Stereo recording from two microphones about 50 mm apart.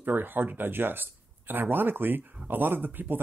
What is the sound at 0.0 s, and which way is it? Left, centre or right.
Speech, right.